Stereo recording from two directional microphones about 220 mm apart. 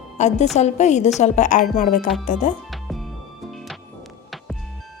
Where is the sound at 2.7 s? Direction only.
Centre (ahead or behind).